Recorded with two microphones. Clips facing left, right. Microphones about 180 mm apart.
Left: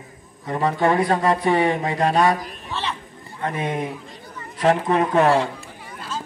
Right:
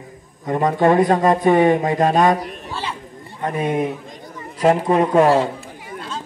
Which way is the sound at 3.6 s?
15° right (ahead or behind).